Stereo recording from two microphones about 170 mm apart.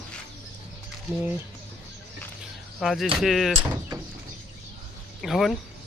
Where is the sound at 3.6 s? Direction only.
20° right (ahead or behind).